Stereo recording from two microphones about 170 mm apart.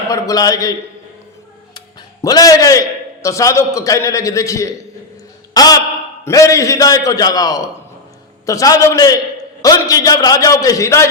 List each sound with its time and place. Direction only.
0.1 s a man's voice: 20° left (ahead or behind)
1.7 s a man's voice: 25° left (ahead or behind)